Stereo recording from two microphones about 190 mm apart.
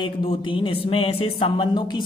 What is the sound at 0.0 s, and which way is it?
Speech, 25° left (ahead or behind).